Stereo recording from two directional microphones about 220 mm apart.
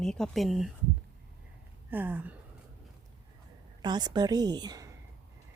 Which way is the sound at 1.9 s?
10° right (ahead or behind).